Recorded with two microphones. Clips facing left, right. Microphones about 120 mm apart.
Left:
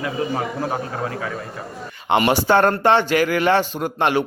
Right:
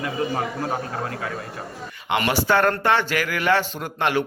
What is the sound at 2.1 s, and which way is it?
Speech, 25° left (ahead or behind).